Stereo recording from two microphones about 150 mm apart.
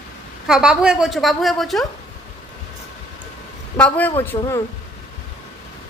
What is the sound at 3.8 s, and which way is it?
Speech, 10° left (ahead or behind).